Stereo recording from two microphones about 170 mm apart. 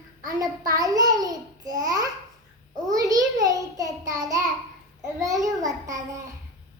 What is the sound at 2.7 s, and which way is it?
Child singing, 20° right (ahead or behind).